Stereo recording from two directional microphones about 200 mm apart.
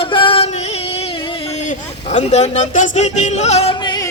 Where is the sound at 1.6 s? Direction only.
35° left (ahead or behind).